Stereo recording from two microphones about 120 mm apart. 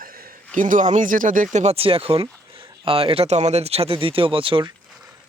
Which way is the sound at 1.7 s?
50° right (ahead or behind).